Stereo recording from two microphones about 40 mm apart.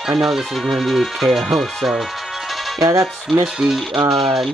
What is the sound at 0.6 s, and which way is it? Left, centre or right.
Speech, centre.